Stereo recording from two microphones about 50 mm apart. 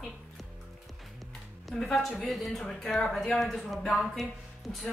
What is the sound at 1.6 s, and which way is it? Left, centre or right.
Speech, centre.